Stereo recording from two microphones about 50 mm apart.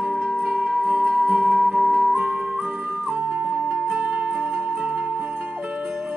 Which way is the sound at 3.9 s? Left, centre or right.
Right.